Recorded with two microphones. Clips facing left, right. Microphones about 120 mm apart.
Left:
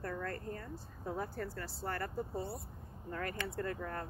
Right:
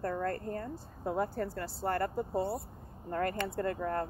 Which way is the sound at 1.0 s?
65° right (ahead or behind).